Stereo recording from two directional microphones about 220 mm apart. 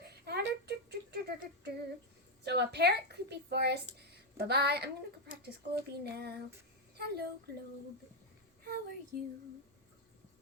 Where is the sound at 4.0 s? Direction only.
45° right (ahead or behind).